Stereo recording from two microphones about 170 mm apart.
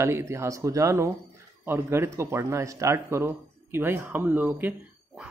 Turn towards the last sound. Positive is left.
turn(degrees=-10)  # may be behind; listen again after turning